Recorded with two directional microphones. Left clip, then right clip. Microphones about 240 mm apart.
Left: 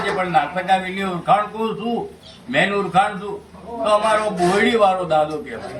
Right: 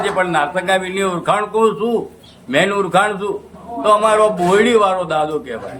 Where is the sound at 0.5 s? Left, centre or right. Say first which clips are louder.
Right 2 dB; centre.